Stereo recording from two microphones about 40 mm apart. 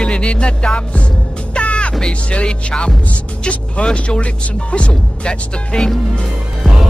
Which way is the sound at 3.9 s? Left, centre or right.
Left.